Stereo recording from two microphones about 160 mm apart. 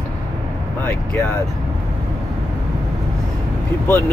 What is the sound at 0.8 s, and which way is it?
Speech, 15° left (ahead or behind).